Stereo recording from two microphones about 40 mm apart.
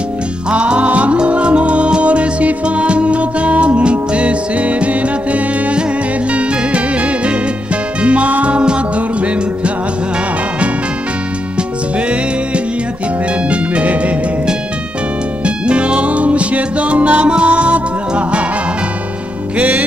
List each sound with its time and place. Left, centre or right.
0.5 s music: right
13.5 s music: right
15.4 s music: right
19.5 s music: right